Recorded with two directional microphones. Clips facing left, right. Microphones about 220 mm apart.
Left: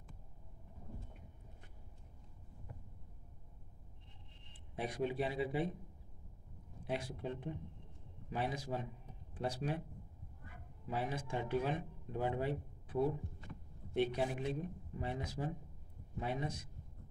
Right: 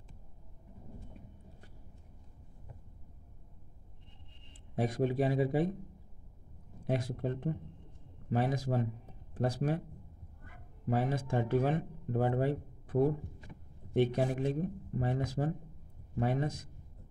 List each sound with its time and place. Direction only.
4.7 s speech: 45° right (ahead or behind)
6.8 s speech: 45° right (ahead or behind)
10.9 s speech: 45° right (ahead or behind)